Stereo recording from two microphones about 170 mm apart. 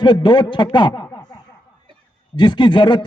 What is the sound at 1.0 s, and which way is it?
Snicker, 25° left (ahead or behind).